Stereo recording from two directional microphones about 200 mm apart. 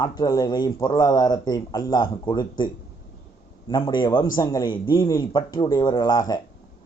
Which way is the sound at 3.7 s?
20° left (ahead or behind).